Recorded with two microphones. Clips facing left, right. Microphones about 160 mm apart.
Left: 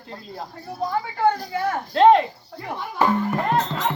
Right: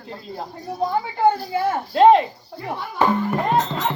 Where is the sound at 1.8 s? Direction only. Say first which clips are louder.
Right 1 dB; 10° right (ahead or behind).